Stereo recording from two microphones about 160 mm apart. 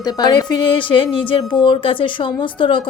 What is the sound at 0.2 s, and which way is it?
Speech, 25° left (ahead or behind).